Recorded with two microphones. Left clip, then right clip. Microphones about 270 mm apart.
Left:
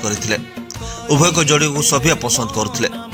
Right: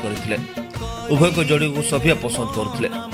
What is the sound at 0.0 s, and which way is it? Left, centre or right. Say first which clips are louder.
A man's voice: left 4 dB; centre.